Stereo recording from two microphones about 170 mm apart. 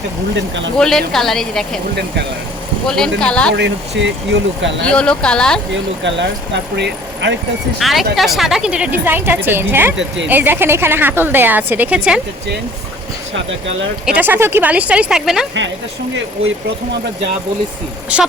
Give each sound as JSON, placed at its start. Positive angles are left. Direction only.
{"t": 0.8, "sound": "a woman's voice", "side_deg": 0}
{"t": 2.8, "sound": "a woman's voice", "side_deg": 5}
{"t": 3.5, "sound": "speech", "side_deg": -90}
{"t": 4.9, "sound": "a woman's voice", "side_deg": 5}
{"t": 5.7, "sound": "speech", "side_deg": -90}
{"t": 7.8, "sound": "a woman's voice", "side_deg": 0}
{"t": 14.0, "sound": "a woman's voice", "side_deg": -10}
{"t": 18.1, "sound": "a woman's voice", "side_deg": -5}